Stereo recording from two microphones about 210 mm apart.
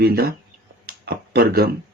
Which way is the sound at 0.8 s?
50° right (ahead or behind).